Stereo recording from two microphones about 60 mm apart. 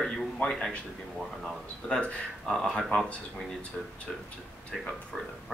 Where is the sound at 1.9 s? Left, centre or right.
Left.